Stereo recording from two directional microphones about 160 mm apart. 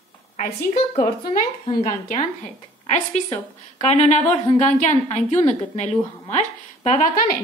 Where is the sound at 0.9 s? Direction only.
50° left (ahead or behind).